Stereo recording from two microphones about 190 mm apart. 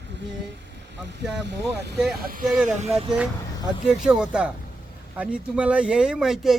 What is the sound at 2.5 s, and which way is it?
Speech, 5° right (ahead or behind).